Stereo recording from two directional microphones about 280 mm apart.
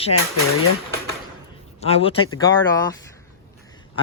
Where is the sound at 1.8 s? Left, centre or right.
Left.